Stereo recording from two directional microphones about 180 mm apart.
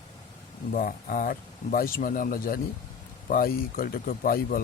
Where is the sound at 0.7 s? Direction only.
50° left (ahead or behind).